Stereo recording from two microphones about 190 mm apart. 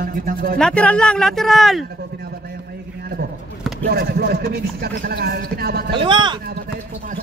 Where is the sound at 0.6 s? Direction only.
5° left (ahead or behind).